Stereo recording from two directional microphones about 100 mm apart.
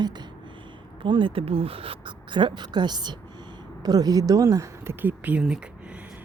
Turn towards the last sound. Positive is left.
turn(degrees=-5)  # may be behind; listen again after turning